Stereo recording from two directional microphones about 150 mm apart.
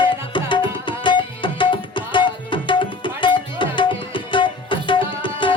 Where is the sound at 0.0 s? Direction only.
35° left (ahead or behind).